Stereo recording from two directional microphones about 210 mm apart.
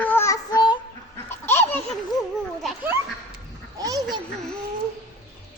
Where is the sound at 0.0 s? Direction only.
10° left (ahead or behind).